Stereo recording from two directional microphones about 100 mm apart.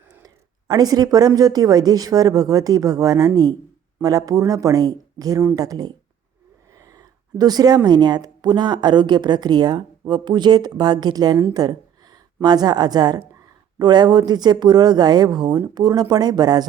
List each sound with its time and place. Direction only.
0.7 s speech: 40° right (ahead or behind)
6.7 s a sound: 35° right (ahead or behind)
7.9 s a woman's voice: 45° right (ahead or behind)